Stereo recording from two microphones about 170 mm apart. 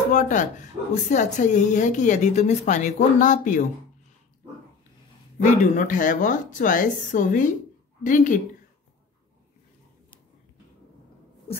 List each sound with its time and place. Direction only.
0.1 s a woman's voice: 50° left (ahead or behind)
5.4 s a woman's voice: 50° left (ahead or behind)